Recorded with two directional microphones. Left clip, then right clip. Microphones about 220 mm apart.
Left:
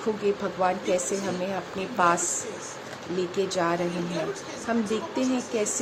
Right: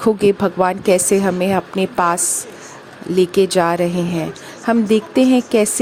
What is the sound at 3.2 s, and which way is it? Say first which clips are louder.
Speech: right 13 dB; 45° right (ahead or behind).